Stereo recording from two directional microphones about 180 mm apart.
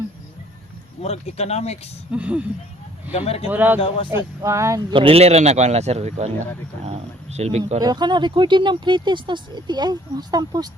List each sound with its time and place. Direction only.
1.0 s speech: 35° left (ahead or behind)
2.1 s speech: 5° right (ahead or behind)
3.1 s speech: 35° left (ahead or behind)
3.5 s speech: 10° right (ahead or behind)
3.8 s a man's voice: 30° left (ahead or behind)
4.4 s speech: 15° right (ahead or behind)
4.9 s a man's voice: 30° right (ahead or behind)
7.8 s speech: 25° right (ahead or behind)